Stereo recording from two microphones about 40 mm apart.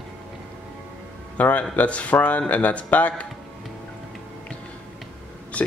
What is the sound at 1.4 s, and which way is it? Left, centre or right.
Speech, left.